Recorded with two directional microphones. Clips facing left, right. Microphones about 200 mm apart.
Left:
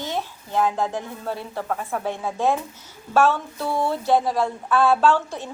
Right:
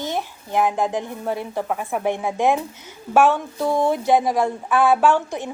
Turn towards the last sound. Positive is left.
turn(degrees=-15)  # may be behind; listen again after turning